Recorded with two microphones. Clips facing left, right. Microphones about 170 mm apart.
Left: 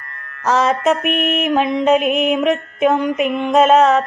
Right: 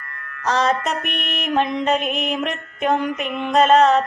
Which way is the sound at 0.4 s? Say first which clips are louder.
Left 5 dB; 5° left (ahead or behind).